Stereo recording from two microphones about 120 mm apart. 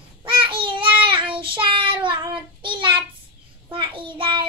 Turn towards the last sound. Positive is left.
turn(degrees=-45)  # may be behind; listen again after turning